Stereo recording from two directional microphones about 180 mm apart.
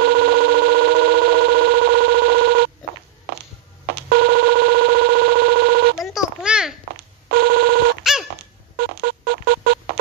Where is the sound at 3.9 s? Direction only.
65° right (ahead or behind).